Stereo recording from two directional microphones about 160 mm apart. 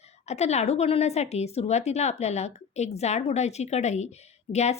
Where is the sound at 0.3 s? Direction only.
45° left (ahead or behind).